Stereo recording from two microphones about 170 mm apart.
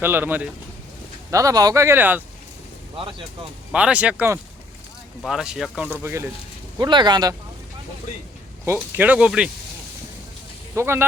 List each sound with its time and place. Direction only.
0.0 s speech: 10° right (ahead or behind)
2.9 s speech: 30° right (ahead or behind)
3.7 s speech: 5° right (ahead or behind)
6.7 s speech: 25° right (ahead or behind)
8.6 s speech: 15° right (ahead or behind)
10.8 s speech: 15° right (ahead or behind)